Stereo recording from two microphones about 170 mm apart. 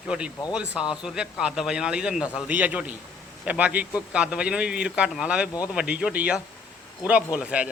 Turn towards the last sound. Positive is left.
turn(degrees=-5)  # may be behind; listen again after turning